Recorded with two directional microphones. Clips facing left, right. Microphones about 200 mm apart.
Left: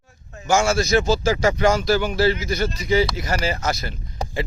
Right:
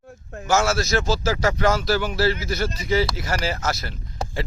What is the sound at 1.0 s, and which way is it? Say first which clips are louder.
A man's voice: left 3 dB; 20° left (ahead or behind).